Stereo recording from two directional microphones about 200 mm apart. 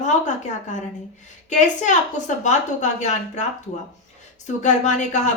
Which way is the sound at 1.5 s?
35° left (ahead or behind).